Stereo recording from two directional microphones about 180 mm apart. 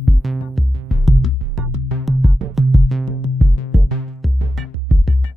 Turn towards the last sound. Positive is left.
turn(degrees=0)  # may be behind; listen again after turning